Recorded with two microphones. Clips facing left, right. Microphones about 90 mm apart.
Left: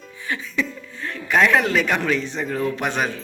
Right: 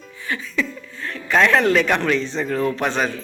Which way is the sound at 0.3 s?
15° left (ahead or behind).